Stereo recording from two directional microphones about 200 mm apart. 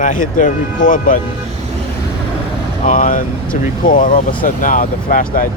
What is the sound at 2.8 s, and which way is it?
Speech, 40° left (ahead or behind).